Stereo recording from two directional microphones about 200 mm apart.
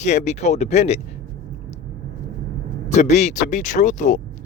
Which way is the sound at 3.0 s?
35° left (ahead or behind).